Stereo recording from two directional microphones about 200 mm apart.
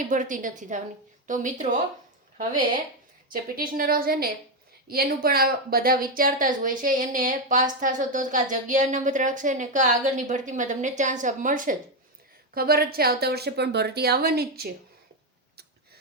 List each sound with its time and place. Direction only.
0.0 s speech: 40° right (ahead or behind)
3.2 s a woman's voice: 45° right (ahead or behind)